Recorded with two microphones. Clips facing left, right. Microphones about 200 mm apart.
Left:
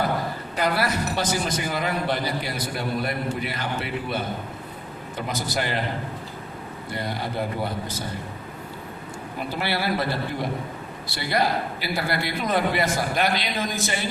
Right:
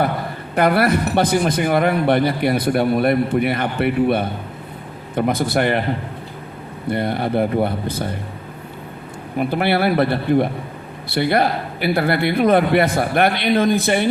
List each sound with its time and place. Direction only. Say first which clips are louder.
0.5 s a man's voice: right 9 dB; 55° right (ahead or behind)
6.9 s a man's voice: right 9 dB; 60° right (ahead or behind)
9.4 s a man's voice: right 9 dB; 60° right (ahead or behind)